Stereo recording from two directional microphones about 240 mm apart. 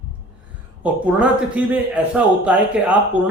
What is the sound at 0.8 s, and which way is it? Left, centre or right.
Speech, centre.